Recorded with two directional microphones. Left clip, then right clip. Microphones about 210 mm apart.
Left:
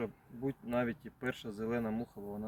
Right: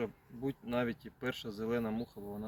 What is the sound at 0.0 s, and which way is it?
Speech, 20° left (ahead or behind).